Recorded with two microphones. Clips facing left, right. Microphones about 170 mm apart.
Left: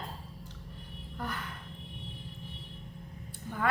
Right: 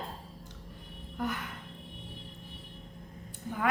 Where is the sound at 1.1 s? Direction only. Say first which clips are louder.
Right 4 dB; 15° right (ahead or behind).